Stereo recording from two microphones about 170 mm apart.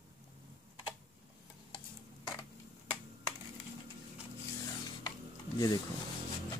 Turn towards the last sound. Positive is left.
turn(degrees=20)  # may be behind; listen again after turning